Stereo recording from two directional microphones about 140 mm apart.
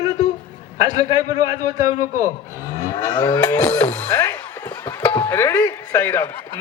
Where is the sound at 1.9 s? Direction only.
70° left (ahead or behind).